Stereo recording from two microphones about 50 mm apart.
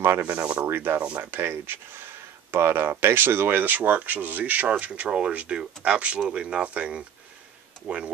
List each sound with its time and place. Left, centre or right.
0.0 s speech: right
0.7 s speech: right